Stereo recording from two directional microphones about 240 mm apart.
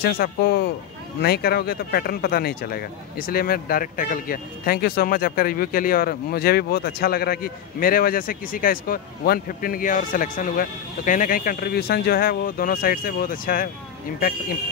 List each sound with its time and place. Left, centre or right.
0.0 s speech: left